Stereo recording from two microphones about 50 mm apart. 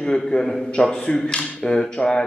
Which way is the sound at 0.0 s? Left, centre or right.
Centre.